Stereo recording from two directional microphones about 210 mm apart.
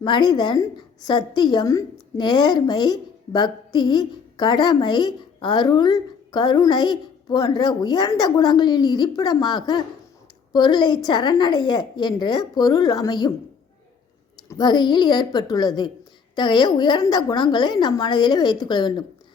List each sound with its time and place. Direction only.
0.0 s a woman's voice: 20° left (ahead or behind)
14.6 s a woman's voice: 20° left (ahead or behind)